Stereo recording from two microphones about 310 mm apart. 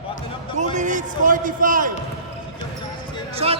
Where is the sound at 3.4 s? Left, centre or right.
Centre.